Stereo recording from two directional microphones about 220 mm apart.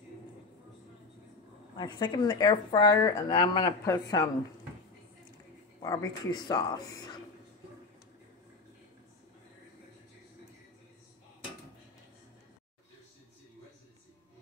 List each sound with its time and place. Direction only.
1.8 s speech: 20° left (ahead or behind)
5.8 s speech: 20° left (ahead or behind)